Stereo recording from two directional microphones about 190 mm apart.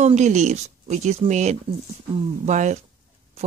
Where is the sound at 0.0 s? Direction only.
40° right (ahead or behind).